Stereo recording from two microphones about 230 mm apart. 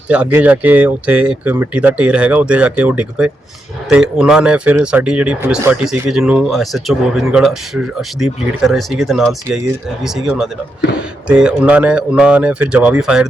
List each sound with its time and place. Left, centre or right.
0.1 s speech: centre
10.9 s speech: left
11.3 s speech: centre